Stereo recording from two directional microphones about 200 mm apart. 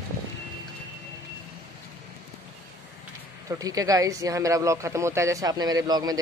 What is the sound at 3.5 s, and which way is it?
Speech, 15° right (ahead or behind).